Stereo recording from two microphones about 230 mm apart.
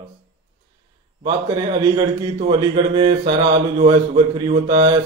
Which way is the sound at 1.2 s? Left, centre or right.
Centre.